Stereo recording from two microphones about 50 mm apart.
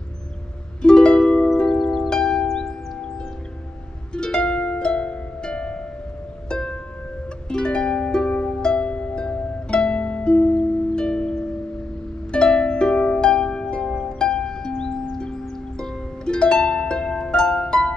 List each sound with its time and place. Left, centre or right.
0.8 s music: centre
4.1 s harp: centre
6.5 s music: centre
12.3 s harp: centre
13.3 s music: centre
15.8 s harp: centre